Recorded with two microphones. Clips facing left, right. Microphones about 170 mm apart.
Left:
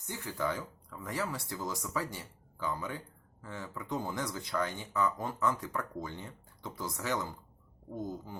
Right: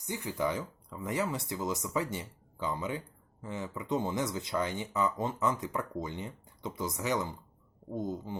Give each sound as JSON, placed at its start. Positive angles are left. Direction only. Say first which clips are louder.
{"t": 0.0, "sound": "speech", "louder": "right 3 dB", "side_deg": -15}